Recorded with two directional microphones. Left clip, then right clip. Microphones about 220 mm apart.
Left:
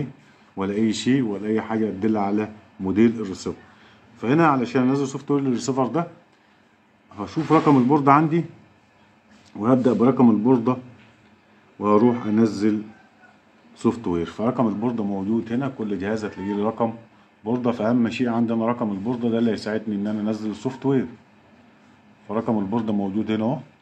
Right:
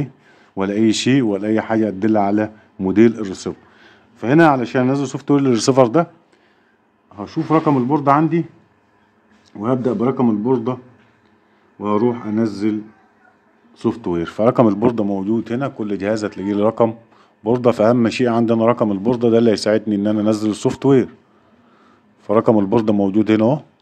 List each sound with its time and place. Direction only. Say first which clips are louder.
0.6 s speech: right 7 dB; 45° right (ahead or behind)
7.2 s a man's voice: right 2 dB; 25° right (ahead or behind)
9.5 s a man's voice: even; 25° right (ahead or behind)
11.8 s a man's voice: even; 25° right (ahead or behind)
13.7 s speech: right 3 dB; 30° right (ahead or behind); by 21.1 s 50° right (ahead or behind)
22.3 s speech: right 10 dB; 45° right (ahead or behind)